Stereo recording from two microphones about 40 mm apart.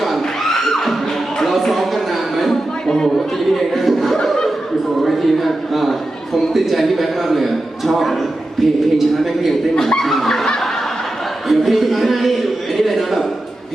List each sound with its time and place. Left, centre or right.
0.2 s music: centre
1.4 s a sound: centre
2.9 s a sound: centre
3.3 s a man's voice: centre
9.7 s speech: centre
11.4 s a man's voice: centre